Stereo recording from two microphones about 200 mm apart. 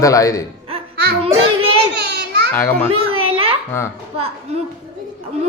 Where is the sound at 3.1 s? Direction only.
30° right (ahead or behind).